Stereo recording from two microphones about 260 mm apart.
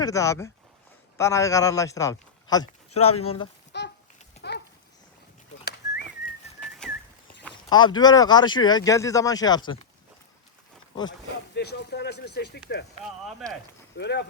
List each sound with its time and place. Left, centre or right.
0.0 s speech: centre
3.7 s a sound: left
6.6 s whistling: centre
7.7 s speech: centre
11.5 s speech: left
13.9 s speech: left